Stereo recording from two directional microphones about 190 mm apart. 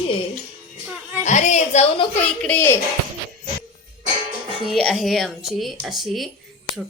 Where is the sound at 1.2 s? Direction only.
40° left (ahead or behind).